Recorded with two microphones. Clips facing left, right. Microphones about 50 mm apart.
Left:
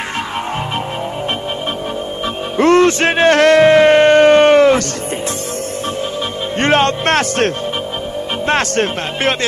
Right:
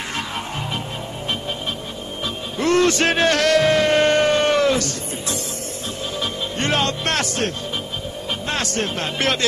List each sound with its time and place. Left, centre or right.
2.5 s a sound: left
6.6 s music: left
8.5 s speech: left
9.2 s speech: left